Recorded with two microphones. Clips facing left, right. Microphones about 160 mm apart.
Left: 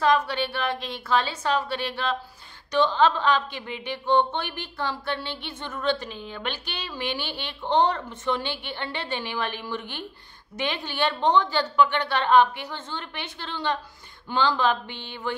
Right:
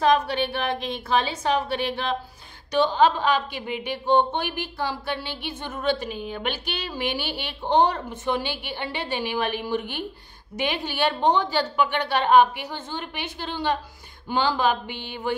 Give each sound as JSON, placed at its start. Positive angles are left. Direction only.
{"t": 0.0, "sound": "a woman's voice", "side_deg": -15}